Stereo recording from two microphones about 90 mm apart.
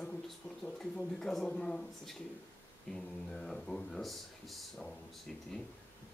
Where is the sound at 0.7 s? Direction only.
5° left (ahead or behind).